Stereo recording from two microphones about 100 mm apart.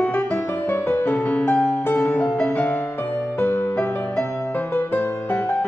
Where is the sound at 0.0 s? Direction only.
20° left (ahead or behind).